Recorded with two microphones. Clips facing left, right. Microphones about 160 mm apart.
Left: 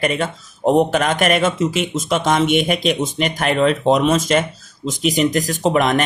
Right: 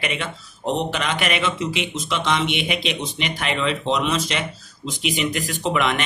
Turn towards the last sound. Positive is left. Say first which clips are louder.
# left 6 dB
turn(degrees=40)  # may be behind; listen again after turning